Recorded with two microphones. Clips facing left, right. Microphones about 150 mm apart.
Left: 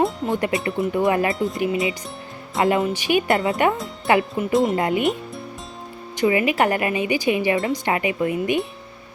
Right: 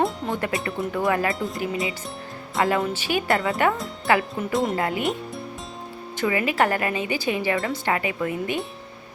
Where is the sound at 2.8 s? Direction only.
10° left (ahead or behind).